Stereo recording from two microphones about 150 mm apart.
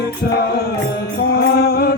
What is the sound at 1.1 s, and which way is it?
Mantra, 90° left.